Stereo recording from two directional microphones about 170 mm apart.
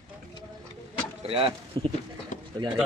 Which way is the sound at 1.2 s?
35° right (ahead or behind).